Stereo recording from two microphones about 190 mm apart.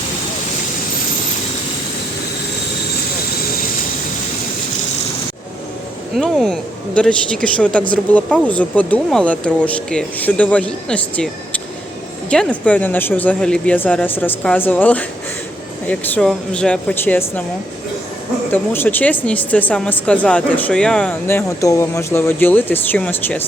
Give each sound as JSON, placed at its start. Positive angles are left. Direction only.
{"t": 6.1, "sound": "speech", "side_deg": 0}
{"t": 18.5, "sound": "speech", "side_deg": 10}